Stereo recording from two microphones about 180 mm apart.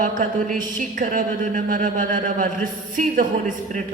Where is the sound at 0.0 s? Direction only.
45° right (ahead or behind).